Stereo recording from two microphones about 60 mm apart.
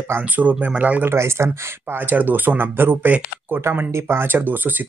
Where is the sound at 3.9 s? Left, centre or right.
Right.